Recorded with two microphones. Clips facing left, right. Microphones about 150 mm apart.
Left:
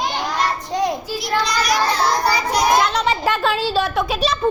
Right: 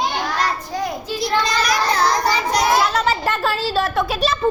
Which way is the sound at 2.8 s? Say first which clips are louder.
Even; centre (ahead or behind).